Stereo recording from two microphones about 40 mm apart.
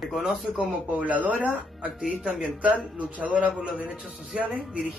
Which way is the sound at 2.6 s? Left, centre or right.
Right.